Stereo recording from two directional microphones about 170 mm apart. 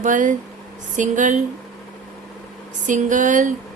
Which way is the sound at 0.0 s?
50° right (ahead or behind).